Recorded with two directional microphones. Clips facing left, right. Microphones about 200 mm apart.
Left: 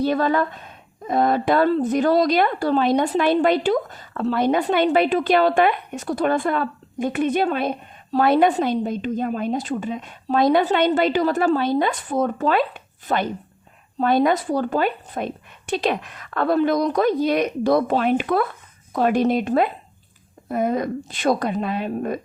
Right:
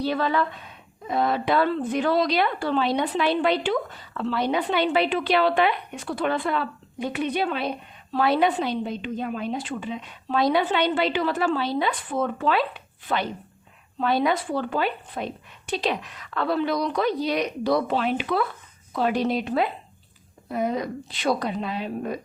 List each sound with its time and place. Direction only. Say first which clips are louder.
0.0 s speech: left 4 dB; 45° left (ahead or behind)